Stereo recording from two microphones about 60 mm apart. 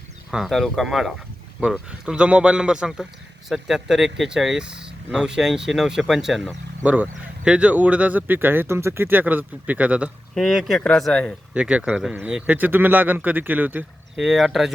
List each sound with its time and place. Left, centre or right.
0.3 s speech: centre
2.0 s a man's voice: centre
6.8 s speech: right
10.3 s speech: centre
11.5 s speech: centre
12.5 s speech: right
14.2 s speech: centre